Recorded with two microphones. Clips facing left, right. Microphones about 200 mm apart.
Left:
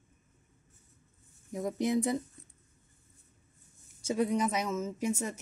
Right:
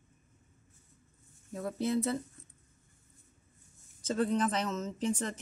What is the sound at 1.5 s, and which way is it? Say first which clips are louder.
Speech: left 2 dB; 15° left (ahead or behind).